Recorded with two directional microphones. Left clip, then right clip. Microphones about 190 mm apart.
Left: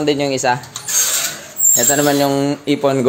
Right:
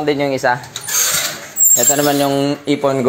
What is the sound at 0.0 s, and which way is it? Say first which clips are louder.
Speech: right 1 dB; 20° left (ahead or behind).